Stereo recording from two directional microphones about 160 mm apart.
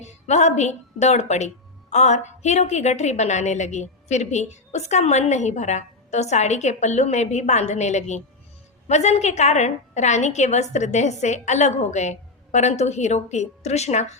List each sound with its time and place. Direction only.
0.0 s a woman's voice: 45° left (ahead or behind)